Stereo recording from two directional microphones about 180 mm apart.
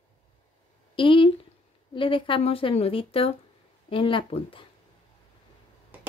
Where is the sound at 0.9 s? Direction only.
30° left (ahead or behind).